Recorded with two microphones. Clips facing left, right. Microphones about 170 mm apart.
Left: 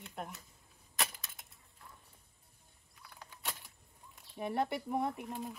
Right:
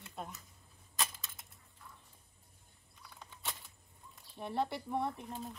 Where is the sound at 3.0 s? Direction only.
Centre (ahead or behind).